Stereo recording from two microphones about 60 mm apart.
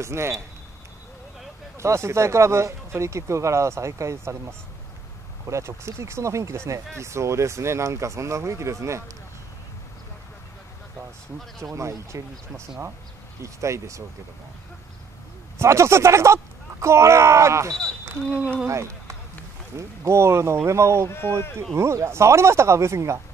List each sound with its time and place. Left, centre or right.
0.0 s speech: right
1.8 s speech: right
11.6 s speech: right
15.6 s speech: right
18.7 s speech: right
20.0 s speech: right
21.1 s speech: left
21.7 s speech: right